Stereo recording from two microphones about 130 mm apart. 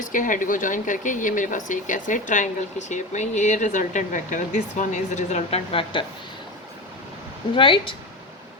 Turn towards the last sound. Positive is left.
turn(degrees=40)  # may be behind; listen again after turning